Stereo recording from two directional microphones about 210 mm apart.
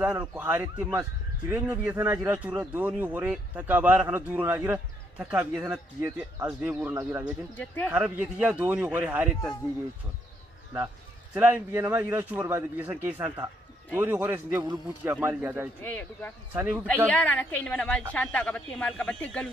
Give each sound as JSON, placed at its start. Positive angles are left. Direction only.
{"t": 0.0, "sound": "speech", "side_deg": -10}
{"t": 7.5, "sound": "a woman's voice", "side_deg": 10}
{"t": 7.9, "sound": "speech", "side_deg": -10}
{"t": 11.3, "sound": "speech", "side_deg": -10}
{"t": 15.8, "sound": "a woman's voice", "side_deg": 10}
{"t": 16.5, "sound": "speech", "side_deg": -10}
{"t": 16.8, "sound": "a woman's voice", "side_deg": 5}